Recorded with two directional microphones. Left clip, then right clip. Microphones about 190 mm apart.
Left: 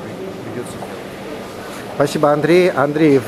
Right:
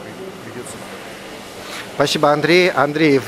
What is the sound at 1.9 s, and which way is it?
Speech, 20° right (ahead or behind).